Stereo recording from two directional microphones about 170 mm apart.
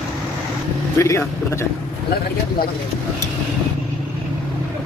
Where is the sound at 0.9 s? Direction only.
15° left (ahead or behind).